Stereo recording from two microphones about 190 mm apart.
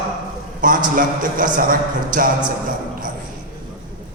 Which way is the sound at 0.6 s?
45° right (ahead or behind).